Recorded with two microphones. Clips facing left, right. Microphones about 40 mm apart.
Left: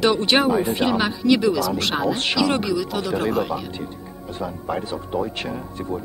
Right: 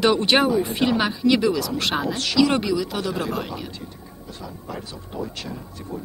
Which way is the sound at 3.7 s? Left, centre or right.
Left.